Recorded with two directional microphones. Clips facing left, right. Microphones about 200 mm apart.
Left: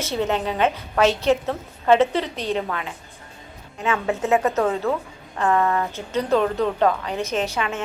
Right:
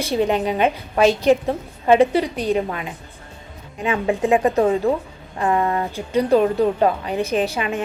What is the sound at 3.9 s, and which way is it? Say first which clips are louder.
A woman's voice: right 3 dB; 15° right (ahead or behind).